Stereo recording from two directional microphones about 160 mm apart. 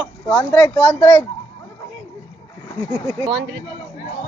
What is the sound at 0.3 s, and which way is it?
Speech, 10° left (ahead or behind).